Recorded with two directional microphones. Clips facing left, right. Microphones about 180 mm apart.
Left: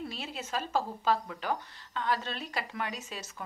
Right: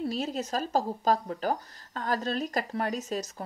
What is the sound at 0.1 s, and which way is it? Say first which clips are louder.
Speech: right 6 dB; 40° right (ahead or behind).